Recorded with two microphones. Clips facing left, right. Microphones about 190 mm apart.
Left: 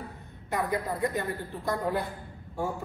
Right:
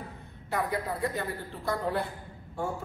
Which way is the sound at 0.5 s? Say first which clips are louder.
Left 1 dB; 20° left (ahead or behind).